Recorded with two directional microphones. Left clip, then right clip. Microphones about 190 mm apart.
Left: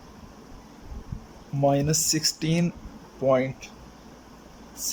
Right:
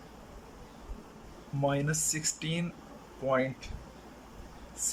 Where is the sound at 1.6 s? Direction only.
20° left (ahead or behind).